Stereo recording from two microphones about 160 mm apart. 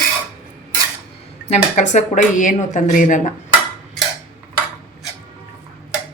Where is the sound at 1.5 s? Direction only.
50° left (ahead or behind).